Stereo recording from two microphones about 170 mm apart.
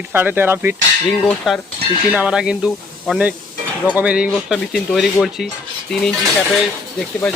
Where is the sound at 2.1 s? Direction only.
5° right (ahead or behind).